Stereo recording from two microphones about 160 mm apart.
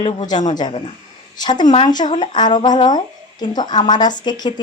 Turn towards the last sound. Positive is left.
turn(degrees=25)  # may be behind; listen again after turning